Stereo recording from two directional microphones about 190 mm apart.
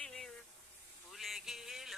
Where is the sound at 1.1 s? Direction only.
Centre (ahead or behind).